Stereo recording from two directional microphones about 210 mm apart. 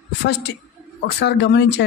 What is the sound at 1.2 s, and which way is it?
Speech, 55° left (ahead or behind).